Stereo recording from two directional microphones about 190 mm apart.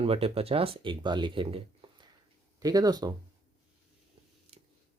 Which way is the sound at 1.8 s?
30° right (ahead or behind).